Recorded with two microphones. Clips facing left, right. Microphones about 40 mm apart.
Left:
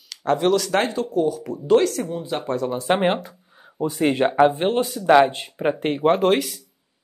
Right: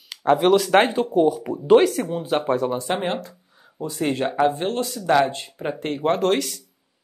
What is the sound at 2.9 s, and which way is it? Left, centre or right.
Speech, left.